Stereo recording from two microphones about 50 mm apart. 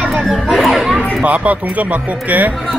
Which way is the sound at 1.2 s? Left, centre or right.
Right.